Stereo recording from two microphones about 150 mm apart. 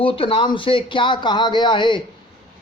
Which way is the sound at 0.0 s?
35° left (ahead or behind).